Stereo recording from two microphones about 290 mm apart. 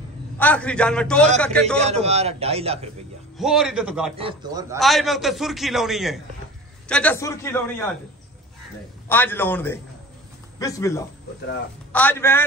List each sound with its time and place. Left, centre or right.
0.4 s a man's voice: centre
1.8 s a man's voice: right
3.3 s a man's voice: centre
4.2 s a man's voice: centre
4.7 s a man's voice: centre
9.1 s a man's voice: centre